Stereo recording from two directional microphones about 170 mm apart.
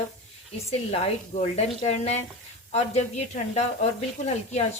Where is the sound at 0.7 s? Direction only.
35° left (ahead or behind).